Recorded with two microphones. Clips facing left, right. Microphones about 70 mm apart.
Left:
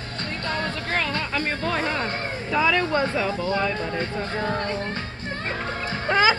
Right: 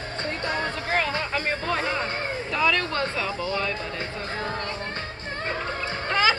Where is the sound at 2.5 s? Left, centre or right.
Centre.